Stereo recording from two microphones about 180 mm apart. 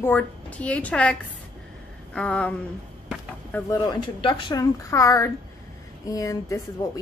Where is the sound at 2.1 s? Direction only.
5° left (ahead or behind).